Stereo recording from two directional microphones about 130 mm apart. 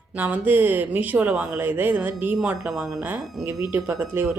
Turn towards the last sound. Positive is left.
turn(degrees=-20)  # may be behind; listen again after turning